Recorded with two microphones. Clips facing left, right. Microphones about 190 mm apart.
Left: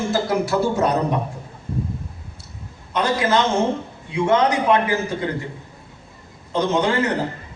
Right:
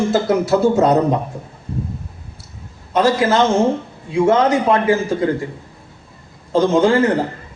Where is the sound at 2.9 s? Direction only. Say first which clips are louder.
Right 5 dB; 30° right (ahead or behind).